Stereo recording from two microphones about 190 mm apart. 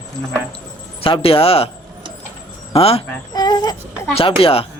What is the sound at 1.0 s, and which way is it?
Speech, 30° left (ahead or behind).